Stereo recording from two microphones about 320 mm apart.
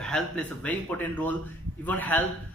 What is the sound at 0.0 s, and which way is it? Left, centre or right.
A man's voice, centre.